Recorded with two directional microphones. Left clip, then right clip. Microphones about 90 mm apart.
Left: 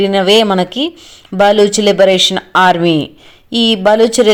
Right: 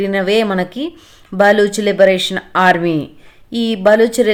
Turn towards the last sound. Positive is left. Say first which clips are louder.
# left 2 dB
turn(degrees=25)  # may be behind; listen again after turning